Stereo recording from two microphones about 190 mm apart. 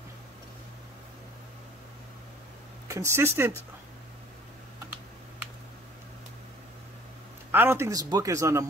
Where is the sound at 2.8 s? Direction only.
15° right (ahead or behind).